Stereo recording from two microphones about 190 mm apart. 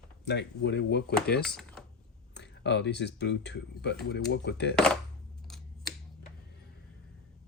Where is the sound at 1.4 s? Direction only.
5° left (ahead or behind).